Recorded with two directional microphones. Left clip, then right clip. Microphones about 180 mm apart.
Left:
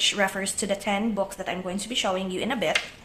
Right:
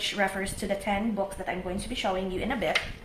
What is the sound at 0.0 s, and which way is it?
Speech, 30° left (ahead or behind).